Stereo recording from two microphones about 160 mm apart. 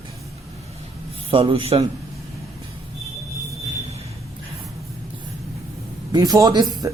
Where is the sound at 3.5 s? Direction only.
40° right (ahead or behind).